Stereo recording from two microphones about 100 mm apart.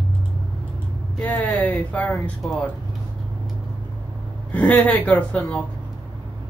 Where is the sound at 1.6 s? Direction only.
15° left (ahead or behind).